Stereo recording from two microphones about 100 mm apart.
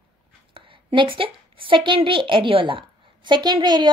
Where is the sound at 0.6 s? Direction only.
60° right (ahead or behind).